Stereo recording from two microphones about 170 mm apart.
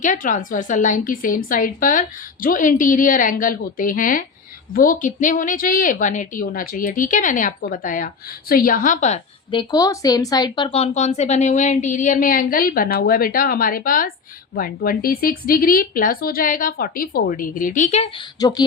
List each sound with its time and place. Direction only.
0.0 s a woman's voice: 50° left (ahead or behind)
9.5 s a woman's voice: 25° left (ahead or behind); by 18.1 s 40° left (ahead or behind)
18.3 s speech: 20° left (ahead or behind)